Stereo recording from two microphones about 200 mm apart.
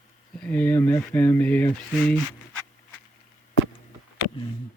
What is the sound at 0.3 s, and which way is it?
Speech, 5° left (ahead or behind).